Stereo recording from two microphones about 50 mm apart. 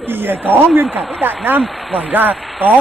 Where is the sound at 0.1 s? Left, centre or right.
Right.